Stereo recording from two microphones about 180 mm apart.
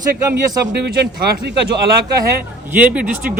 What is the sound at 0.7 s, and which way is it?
Speech, 70° right (ahead or behind).